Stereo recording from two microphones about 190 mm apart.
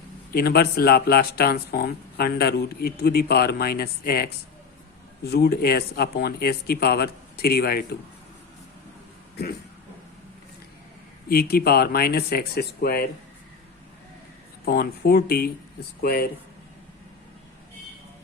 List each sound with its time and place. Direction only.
0.3 s speech: 55° left (ahead or behind)
11.3 s speech: 50° left (ahead or behind)
14.6 s speech: 55° left (ahead or behind)